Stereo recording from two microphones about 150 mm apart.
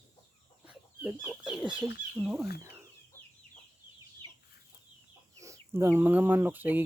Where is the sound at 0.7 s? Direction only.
5° right (ahead or behind).